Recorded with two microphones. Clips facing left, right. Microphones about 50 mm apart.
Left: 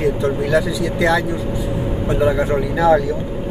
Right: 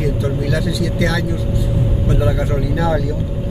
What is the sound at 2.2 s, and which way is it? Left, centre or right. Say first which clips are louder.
Speech: left 6 dB; centre.